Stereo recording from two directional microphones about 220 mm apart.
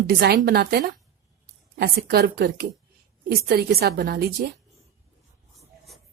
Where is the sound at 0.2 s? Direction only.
50° right (ahead or behind).